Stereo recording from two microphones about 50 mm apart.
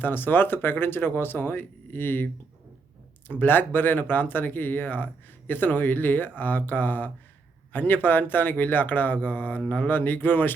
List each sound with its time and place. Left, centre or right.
0.0 s speech: left